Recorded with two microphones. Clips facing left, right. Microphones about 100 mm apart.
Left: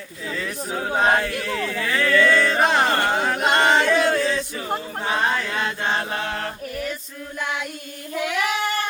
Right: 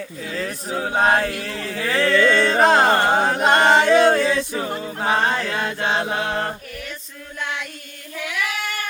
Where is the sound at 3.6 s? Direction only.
25° right (ahead or behind).